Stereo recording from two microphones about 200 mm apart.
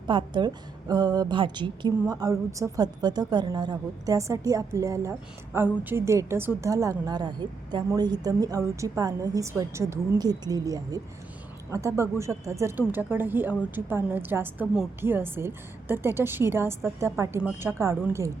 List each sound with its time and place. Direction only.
0.1 s a woman's voice: 25° right (ahead or behind)